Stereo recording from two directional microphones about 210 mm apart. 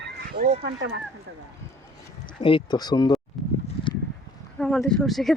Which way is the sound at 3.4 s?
Centre (ahead or behind).